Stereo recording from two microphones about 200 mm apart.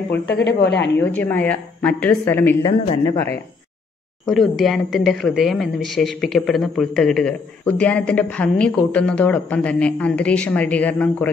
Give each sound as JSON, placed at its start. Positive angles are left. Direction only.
{"t": 0.3, "sound": "speech", "side_deg": 60}
{"t": 0.9, "sound": "a woman's voice", "side_deg": 10}
{"t": 2.6, "sound": "speech", "side_deg": 20}
{"t": 4.3, "sound": "a woman's voice", "side_deg": 0}